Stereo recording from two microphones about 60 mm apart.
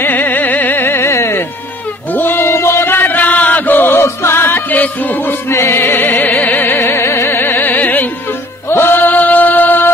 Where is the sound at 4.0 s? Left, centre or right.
Left.